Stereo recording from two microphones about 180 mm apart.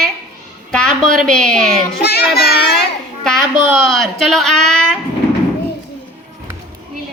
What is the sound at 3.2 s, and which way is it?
A child's voice, 5° left (ahead or behind).